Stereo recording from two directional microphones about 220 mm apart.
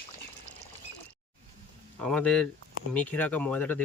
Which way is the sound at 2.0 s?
5° left (ahead or behind).